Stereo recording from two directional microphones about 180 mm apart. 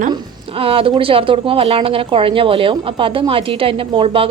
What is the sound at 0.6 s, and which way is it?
Speech, 30° right (ahead or behind).